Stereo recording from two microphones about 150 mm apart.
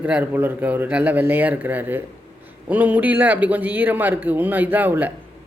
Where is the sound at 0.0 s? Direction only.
10° right (ahead or behind).